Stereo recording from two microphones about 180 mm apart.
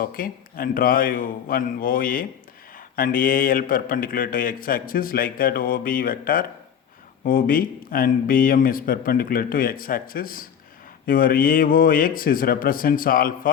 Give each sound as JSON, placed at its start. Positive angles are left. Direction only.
{"t": 0.0, "sound": "speech", "side_deg": 50}